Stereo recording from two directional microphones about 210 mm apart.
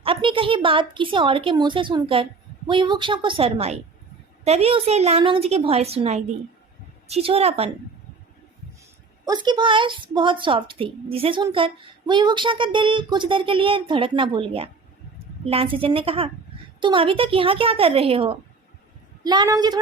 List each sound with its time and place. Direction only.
0.0 s a woman's voice: 25° right (ahead or behind)
9.2 s a woman's voice: 20° right (ahead or behind)